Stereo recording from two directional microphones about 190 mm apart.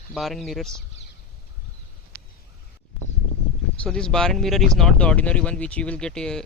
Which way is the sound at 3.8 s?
5° left (ahead or behind).